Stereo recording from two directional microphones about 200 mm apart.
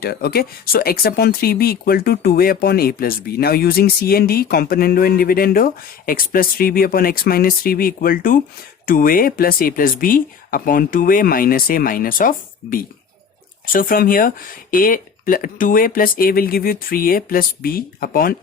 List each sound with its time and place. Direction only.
0.0 s speech: 50° left (ahead or behind)
13.7 s speech: 45° left (ahead or behind)